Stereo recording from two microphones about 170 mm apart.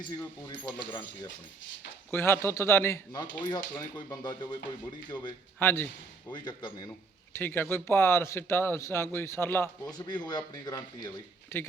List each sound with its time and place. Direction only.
0.0 s speech: 20° left (ahead or behind)
2.0 s speech: 15° left (ahead or behind)
6.3 s speech: 25° left (ahead or behind)
7.3 s speech: 10° left (ahead or behind)
10.1 s speech: 25° left (ahead or behind)